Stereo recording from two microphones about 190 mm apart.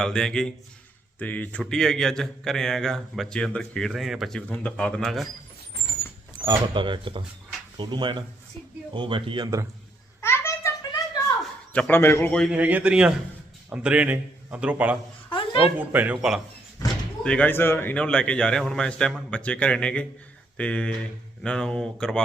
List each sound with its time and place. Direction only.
0.0 s speech: 5° left (ahead or behind)
6.4 s speech: 25° right (ahead or behind)
10.2 s a sound: 15° left (ahead or behind)
11.7 s a man's voice: 10° left (ahead or behind)
12.5 s speech: 10° right (ahead or behind)
15.3 s a sound: 30° left (ahead or behind)
15.8 s speech: 10° right (ahead or behind)
17.2 s speech: 5° left (ahead or behind)